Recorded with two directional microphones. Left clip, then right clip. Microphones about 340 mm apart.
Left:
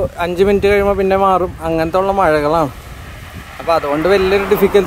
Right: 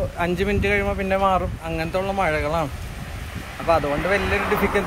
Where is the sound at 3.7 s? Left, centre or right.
Centre.